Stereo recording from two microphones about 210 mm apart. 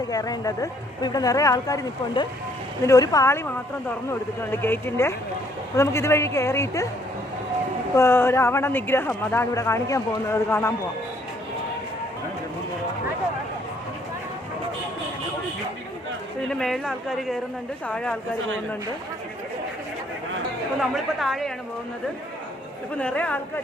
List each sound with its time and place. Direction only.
0.1 s speech: 15° left (ahead or behind)
4.5 s speech: 10° left (ahead or behind)
7.9 s speech: 10° left (ahead or behind)
16.5 s speech: centre (ahead or behind)
20.9 s speech: centre (ahead or behind)
23.0 s speech: 5° left (ahead or behind)